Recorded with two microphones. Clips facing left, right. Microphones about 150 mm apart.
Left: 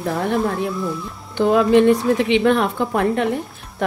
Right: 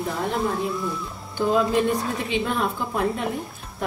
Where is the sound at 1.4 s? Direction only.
75° left (ahead or behind).